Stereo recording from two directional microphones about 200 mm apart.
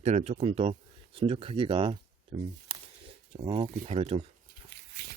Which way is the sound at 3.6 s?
40° right (ahead or behind).